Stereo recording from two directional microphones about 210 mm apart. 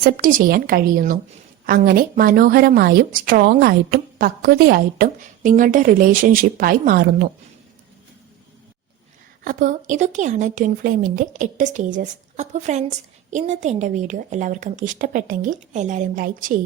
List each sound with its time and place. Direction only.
0.0 s a woman's voice: 40° right (ahead or behind)
9.4 s a woman's voice: 40° right (ahead or behind)